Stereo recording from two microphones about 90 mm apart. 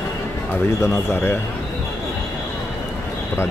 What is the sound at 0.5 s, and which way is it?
Speech, 30° left (ahead or behind).